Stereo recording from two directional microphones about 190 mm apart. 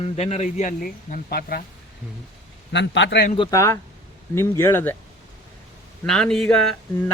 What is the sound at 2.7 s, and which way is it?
Speech, 70° left (ahead or behind).